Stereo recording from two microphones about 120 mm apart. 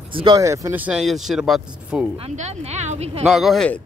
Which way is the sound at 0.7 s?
15° right (ahead or behind).